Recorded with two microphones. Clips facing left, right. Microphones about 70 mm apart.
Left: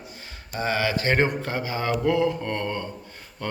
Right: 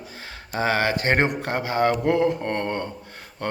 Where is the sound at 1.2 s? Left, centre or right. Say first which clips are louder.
Right 2 dB; right.